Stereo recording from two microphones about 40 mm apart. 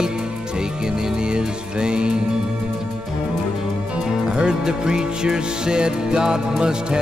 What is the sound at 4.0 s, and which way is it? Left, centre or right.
Music, centre.